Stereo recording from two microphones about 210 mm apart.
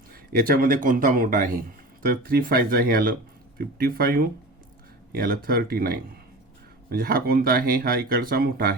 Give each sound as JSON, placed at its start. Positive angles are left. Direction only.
{"t": 0.1, "sound": "a man's voice", "side_deg": -45}